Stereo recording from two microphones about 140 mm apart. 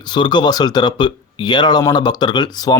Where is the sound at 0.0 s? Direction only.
35° left (ahead or behind).